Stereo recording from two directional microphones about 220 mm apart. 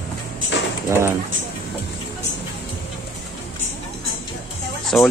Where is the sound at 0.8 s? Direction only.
15° right (ahead or behind).